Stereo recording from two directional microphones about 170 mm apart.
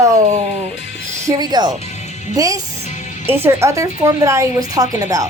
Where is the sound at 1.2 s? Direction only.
25° right (ahead or behind).